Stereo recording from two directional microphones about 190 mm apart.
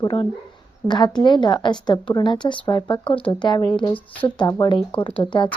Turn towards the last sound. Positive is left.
turn(degrees=25)  # may be behind; listen again after turning